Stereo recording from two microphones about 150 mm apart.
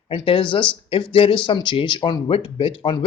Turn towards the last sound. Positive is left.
turn(degrees=35)  # may be behind; listen again after turning